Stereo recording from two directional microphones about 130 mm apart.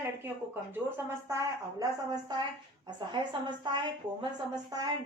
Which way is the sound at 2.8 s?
35° right (ahead or behind).